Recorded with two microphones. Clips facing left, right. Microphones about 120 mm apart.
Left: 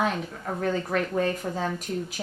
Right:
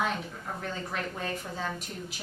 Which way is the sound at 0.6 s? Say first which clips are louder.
Left 10 dB; 55° left (ahead or behind).